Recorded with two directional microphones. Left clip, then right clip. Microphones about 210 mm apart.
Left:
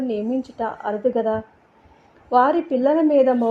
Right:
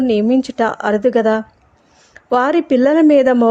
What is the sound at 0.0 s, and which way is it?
Speech, 30° right (ahead or behind).